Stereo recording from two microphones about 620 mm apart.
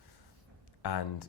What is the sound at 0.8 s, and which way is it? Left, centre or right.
Speech, left.